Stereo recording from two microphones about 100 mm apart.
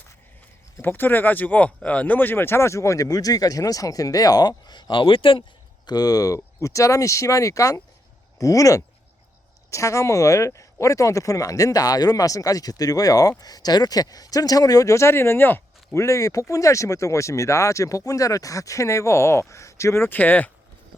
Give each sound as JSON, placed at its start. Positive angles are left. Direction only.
{"t": 0.8, "sound": "speech", "side_deg": 20}
{"t": 5.8, "sound": "speech", "side_deg": 40}